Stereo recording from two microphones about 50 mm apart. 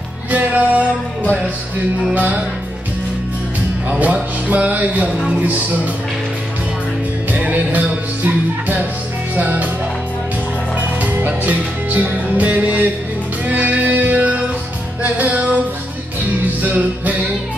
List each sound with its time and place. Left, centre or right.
0.3 s music: right
2.1 s music: right
3.9 s speech: right
7.3 s music: right
11.1 s music: right
16.6 s music: right